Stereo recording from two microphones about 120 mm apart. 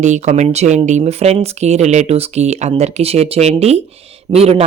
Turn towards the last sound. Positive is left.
turn(degrees=-60)  # may be behind; listen again after turning